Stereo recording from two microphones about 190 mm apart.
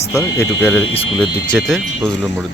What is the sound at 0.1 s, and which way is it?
Speech, 15° left (ahead or behind).